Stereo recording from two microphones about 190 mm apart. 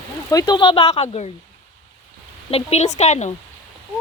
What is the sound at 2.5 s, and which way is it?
Speech, 35° left (ahead or behind).